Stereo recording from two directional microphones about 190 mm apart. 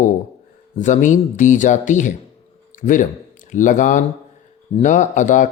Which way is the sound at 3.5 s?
40° left (ahead or behind).